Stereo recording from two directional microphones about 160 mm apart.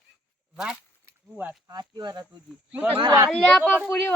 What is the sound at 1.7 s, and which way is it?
Speech, 25° right (ahead or behind).